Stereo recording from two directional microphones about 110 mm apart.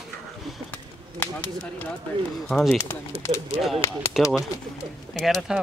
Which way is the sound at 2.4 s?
5° left (ahead or behind).